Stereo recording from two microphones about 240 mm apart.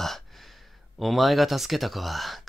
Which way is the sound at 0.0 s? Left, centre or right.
Centre.